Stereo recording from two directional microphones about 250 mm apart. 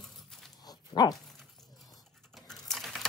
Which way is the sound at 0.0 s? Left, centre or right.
Centre.